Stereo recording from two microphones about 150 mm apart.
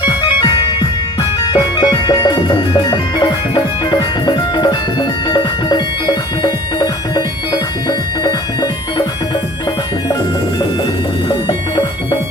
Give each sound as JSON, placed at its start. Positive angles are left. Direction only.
{"t": 0.0, "sound": "music", "side_deg": 30}